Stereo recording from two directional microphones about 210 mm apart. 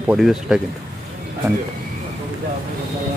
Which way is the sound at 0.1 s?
5° right (ahead or behind).